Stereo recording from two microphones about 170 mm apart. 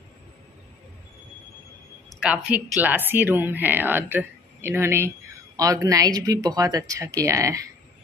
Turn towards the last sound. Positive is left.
turn(degrees=-20)  # may be behind; listen again after turning